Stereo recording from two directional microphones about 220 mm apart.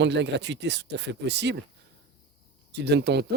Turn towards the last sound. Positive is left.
turn(degrees=-50)  # may be behind; listen again after turning